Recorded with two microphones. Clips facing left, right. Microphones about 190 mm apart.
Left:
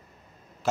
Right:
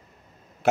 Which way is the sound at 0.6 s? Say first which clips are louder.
Right 6 dB; 60° right (ahead or behind).